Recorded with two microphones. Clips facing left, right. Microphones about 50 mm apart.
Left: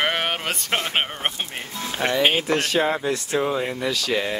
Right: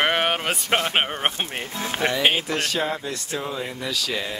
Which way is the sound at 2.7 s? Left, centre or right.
Left.